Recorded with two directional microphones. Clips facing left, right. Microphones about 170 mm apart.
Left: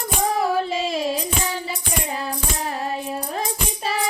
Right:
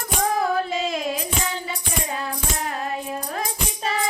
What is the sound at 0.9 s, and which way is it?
Music, 30° left (ahead or behind).